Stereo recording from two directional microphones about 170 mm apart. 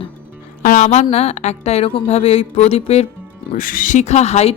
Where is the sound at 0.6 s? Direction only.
50° left (ahead or behind).